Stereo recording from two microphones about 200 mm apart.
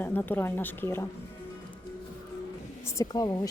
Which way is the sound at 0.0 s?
10° left (ahead or behind).